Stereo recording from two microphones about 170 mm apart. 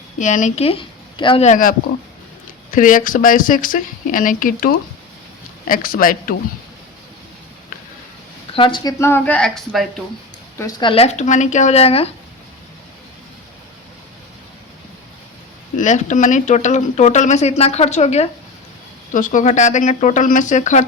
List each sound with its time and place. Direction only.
0.2 s speech: 45° left (ahead or behind)
2.7 s speech: 50° left (ahead or behind)
8.5 s speech: 30° left (ahead or behind); by 9.8 s 5° left (ahead or behind)
10.6 s speech: 25° left (ahead or behind)
15.7 s speech: 45° left (ahead or behind)
19.1 s speech: 50° left (ahead or behind)